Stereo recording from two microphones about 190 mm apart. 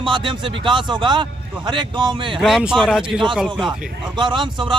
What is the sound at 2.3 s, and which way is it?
Speech, centre (ahead or behind).